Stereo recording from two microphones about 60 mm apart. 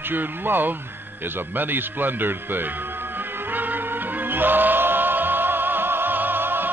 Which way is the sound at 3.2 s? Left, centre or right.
Right.